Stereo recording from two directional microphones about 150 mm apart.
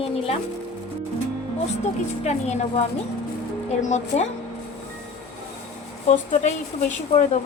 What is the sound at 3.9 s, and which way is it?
Speech, 50° left (ahead or behind).